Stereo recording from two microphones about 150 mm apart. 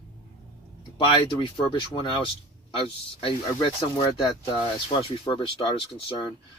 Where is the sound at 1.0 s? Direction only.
35° left (ahead or behind).